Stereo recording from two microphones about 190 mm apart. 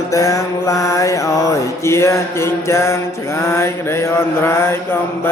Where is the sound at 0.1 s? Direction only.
15° left (ahead or behind).